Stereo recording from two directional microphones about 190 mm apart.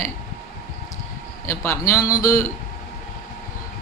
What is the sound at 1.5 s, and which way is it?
Speech, 15° left (ahead or behind).